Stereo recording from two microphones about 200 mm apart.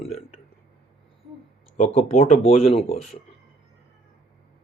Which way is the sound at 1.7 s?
35° left (ahead or behind).